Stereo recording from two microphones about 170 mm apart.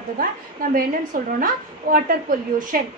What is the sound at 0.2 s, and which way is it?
A woman's voice, 55° right (ahead or behind).